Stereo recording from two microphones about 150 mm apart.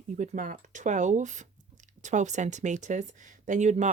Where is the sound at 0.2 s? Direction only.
60° right (ahead or behind).